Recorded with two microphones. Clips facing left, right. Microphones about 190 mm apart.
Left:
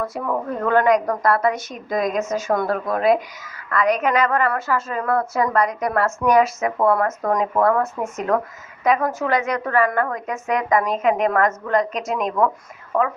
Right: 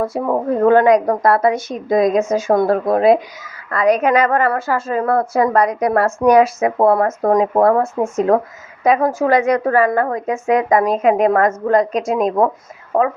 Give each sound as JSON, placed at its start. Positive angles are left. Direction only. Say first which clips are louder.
{"t": 0.0, "sound": "a woman's voice", "louder": "right 6 dB", "side_deg": -30}